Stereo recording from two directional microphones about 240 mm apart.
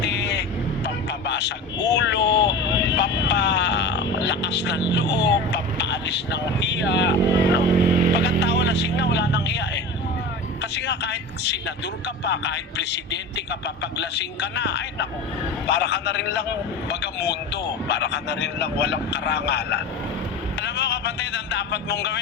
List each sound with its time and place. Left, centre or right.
0.0 s vehicle: left
4.9 s a man's voice: left